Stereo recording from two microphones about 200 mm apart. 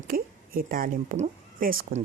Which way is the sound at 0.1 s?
45° right (ahead or behind).